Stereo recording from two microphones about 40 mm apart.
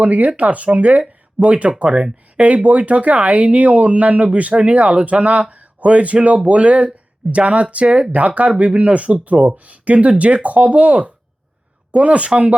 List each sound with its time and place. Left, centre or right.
0.0 s speech: right